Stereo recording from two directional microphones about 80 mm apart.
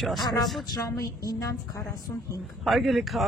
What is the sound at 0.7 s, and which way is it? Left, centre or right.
Speech, left.